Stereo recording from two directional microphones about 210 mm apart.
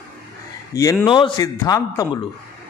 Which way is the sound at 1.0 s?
20° left (ahead or behind).